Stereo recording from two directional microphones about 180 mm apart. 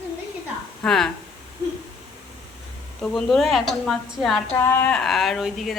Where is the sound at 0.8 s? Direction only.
5° left (ahead or behind).